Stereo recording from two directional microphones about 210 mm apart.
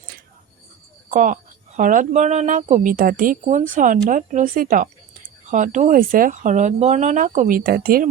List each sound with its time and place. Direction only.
1.1 s speech: 35° right (ahead or behind)